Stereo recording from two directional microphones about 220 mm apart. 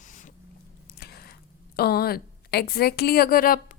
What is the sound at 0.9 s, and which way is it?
Speech, 45° left (ahead or behind).